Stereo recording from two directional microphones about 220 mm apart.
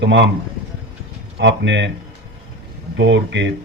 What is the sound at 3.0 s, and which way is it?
Speech, 55° right (ahead or behind).